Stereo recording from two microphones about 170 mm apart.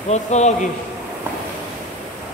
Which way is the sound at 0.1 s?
40° left (ahead or behind).